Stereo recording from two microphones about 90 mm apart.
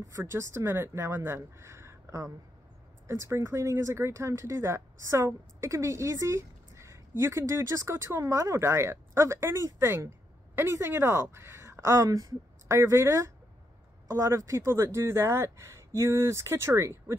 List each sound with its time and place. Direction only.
0.2 s speech: 30° right (ahead or behind)